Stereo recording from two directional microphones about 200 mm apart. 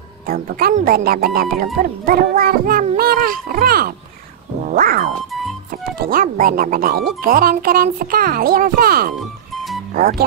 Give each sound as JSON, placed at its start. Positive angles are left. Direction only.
{"t": 0.3, "sound": "speech", "side_deg": -50}
{"t": 4.6, "sound": "cat", "side_deg": -45}
{"t": 5.3, "sound": "music", "side_deg": 0}
{"t": 5.7, "sound": "speech", "side_deg": -45}